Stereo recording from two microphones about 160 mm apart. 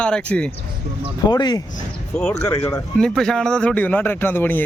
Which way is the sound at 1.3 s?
25° left (ahead or behind).